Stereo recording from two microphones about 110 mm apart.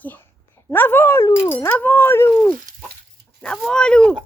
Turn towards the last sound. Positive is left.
turn(degrees=10)  # may be behind; listen again after turning